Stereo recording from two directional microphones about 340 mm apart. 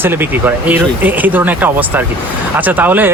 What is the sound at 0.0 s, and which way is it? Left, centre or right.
Speech, centre.